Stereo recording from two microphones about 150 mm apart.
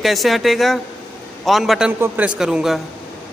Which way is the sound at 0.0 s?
Centre (ahead or behind).